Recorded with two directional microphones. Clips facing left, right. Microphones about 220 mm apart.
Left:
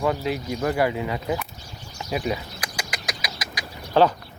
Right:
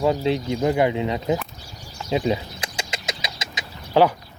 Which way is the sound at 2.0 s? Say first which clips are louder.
Right 4 dB; 25° right (ahead or behind).